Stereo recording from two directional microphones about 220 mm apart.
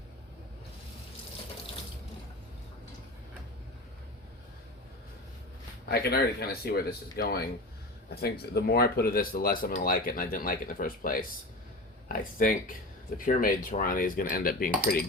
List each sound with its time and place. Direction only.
5.9 s speech: 45° left (ahead or behind)